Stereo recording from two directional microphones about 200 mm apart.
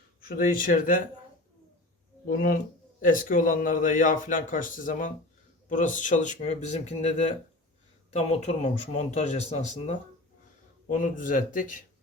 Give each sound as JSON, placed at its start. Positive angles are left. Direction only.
{"t": 0.4, "sound": "speech", "side_deg": 40}
{"t": 2.2, "sound": "speech", "side_deg": 45}